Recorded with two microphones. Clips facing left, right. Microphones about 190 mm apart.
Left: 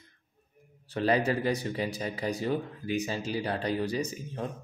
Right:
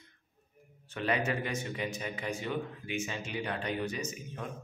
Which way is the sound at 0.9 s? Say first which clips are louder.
Left 5 dB; 35° left (ahead or behind).